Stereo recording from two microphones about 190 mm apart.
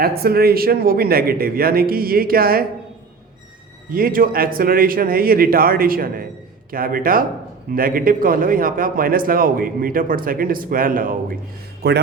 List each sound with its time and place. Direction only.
0.0 s a man's voice: 55° right (ahead or behind)
3.8 s a man's voice: 50° right (ahead or behind)
11.8 s a man's voice: 60° right (ahead or behind)